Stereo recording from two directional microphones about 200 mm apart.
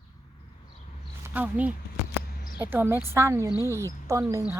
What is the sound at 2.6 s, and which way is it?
Speech, 10° right (ahead or behind).